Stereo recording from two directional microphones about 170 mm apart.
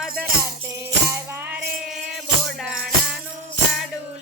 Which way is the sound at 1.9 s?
Centre (ahead or behind).